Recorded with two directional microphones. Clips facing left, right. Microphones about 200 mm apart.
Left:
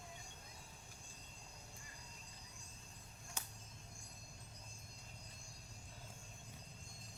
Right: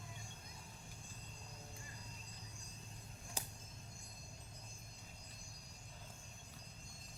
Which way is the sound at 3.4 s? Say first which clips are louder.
Right 4 dB; 35° right (ahead or behind).